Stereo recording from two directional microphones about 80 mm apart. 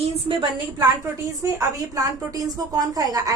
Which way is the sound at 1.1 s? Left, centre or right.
Right.